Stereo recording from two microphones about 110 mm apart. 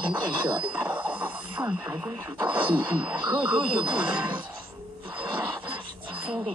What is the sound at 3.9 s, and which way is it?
Speech, 15° right (ahead or behind).